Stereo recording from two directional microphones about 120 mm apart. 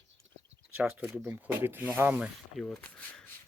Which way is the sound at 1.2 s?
15° right (ahead or behind).